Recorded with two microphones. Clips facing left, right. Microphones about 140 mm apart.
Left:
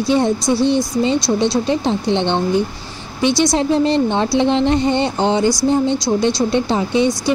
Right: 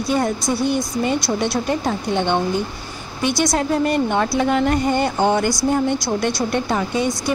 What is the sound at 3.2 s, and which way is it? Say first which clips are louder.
Speech: left 4 dB; 50° right (ahead or behind).